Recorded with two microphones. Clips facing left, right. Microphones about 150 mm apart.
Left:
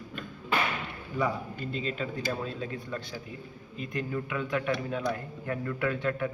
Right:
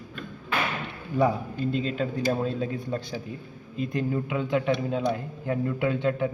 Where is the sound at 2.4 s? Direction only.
35° right (ahead or behind).